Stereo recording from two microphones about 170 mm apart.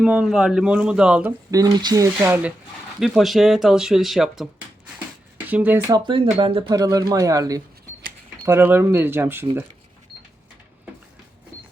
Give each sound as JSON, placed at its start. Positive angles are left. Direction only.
{"t": 0.0, "sound": "speech", "side_deg": -5}
{"t": 1.5, "sound": "speech", "side_deg": -20}
{"t": 3.0, "sound": "speech", "side_deg": 0}
{"t": 5.5, "sound": "speech", "side_deg": -10}
{"t": 5.9, "sound": "speech", "side_deg": -25}